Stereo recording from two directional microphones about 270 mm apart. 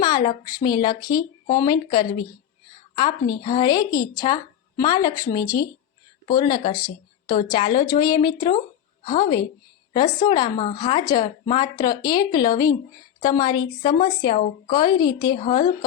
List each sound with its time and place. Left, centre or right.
0.0 s a woman's voice: centre